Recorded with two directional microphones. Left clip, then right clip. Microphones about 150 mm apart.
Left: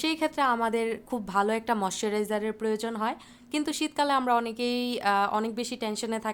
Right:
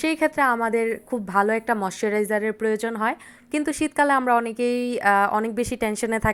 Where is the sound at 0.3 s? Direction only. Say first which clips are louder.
Right 4 dB; 25° right (ahead or behind).